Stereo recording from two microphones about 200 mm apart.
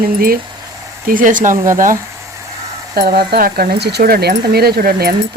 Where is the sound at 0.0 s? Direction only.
45° right (ahead or behind).